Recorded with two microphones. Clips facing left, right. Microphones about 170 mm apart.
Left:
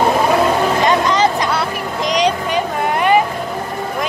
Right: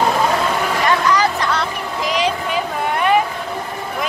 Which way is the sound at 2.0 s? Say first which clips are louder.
Left 3 dB; 5° right (ahead or behind).